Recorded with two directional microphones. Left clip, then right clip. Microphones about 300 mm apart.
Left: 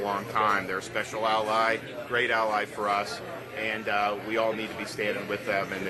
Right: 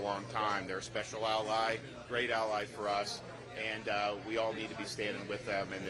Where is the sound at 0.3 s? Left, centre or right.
Right.